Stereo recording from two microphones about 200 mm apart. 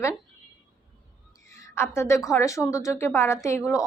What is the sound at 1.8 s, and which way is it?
A woman's voice, 15° left (ahead or behind).